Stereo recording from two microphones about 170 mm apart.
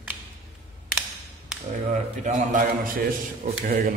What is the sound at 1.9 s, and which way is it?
A man's voice, 50° right (ahead or behind).